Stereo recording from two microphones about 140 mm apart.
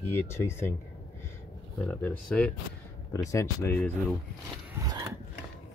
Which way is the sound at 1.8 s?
10° left (ahead or behind).